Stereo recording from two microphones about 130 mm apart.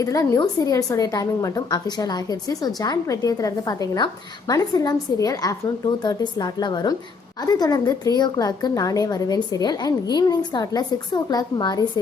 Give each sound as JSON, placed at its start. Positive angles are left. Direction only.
{"t": 0.0, "sound": "a woman's voice", "side_deg": 25}